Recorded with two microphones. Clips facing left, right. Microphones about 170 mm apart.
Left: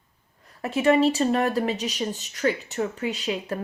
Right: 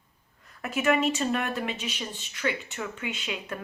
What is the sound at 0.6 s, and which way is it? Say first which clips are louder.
A woman's voice: left 5 dB; 30° left (ahead or behind).